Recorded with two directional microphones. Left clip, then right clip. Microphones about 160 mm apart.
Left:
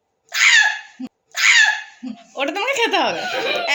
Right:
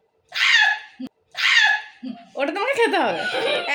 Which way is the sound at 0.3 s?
Centre (ahead or behind).